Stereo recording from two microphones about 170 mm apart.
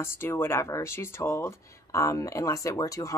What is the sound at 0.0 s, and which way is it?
Speech, 15° left (ahead or behind).